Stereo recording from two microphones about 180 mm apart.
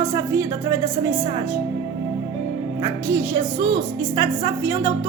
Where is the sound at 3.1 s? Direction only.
15° right (ahead or behind).